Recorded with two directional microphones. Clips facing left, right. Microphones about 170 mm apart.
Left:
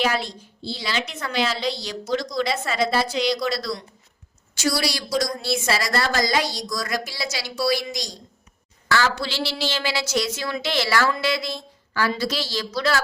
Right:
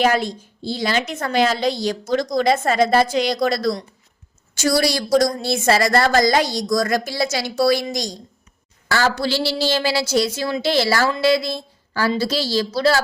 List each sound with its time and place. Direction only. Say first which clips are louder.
0.0 s a woman's voice: right 6 dB; 50° right (ahead or behind); by 13.0 s 30° right (ahead or behind)